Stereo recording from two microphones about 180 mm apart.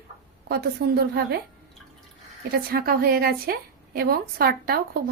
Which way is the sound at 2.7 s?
55° right (ahead or behind).